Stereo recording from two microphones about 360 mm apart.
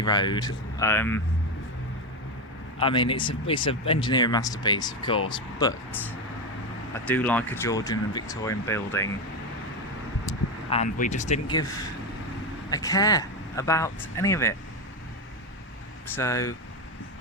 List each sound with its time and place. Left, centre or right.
0.0 s speech: centre
2.7 s speech: centre
10.7 s speech: centre
12.7 s speech: centre
16.1 s speech: centre